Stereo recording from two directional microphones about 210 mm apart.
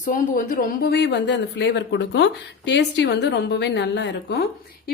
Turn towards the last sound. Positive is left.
turn(degrees=55)  # may be behind; listen again after turning